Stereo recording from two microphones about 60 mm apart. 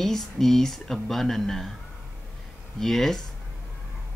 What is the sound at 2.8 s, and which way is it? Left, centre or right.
Speech, centre.